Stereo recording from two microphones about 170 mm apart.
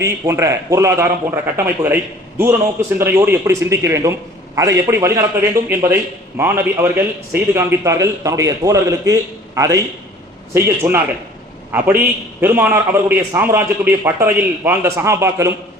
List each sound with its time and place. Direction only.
0.0 s a man's voice: 15° right (ahead or behind)
3.0 s a man's voice: 15° right (ahead or behind)